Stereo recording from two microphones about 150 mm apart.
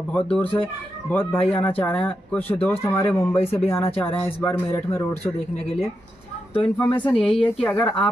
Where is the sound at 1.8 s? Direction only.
10° left (ahead or behind).